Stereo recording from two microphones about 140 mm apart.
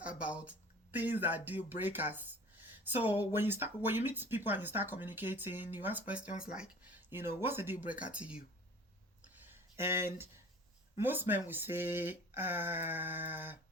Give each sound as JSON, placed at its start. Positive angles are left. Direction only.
{"t": 0.0, "sound": "speech", "side_deg": -10}
{"t": 9.3, "sound": "a sound", "side_deg": -15}
{"t": 10.9, "sound": "speech", "side_deg": -15}